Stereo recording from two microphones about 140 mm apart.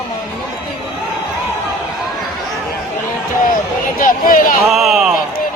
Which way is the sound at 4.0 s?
75° left (ahead or behind).